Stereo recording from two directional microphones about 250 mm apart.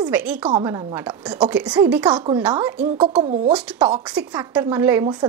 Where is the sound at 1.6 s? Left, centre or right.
Centre.